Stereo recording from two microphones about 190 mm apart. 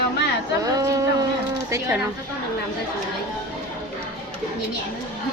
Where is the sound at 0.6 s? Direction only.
20° right (ahead or behind).